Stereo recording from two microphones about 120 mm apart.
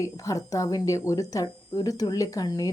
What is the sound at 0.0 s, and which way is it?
Speech, 30° left (ahead or behind).